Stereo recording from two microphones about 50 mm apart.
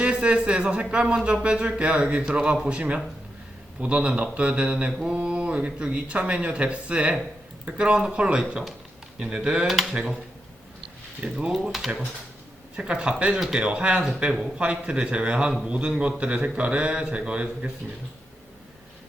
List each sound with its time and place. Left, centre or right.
0.0 s a sound: right
0.6 s speech: right
9.6 s speech: centre
11.2 s speech: centre
11.5 s speech: centre
12.7 s speech: centre